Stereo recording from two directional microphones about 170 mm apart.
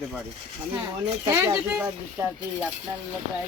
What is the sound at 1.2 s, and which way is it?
Speech, 15° right (ahead or behind).